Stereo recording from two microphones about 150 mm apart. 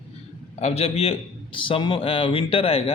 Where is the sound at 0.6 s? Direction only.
45° left (ahead or behind).